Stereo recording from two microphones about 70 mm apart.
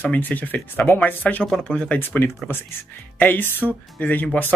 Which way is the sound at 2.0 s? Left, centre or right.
Left.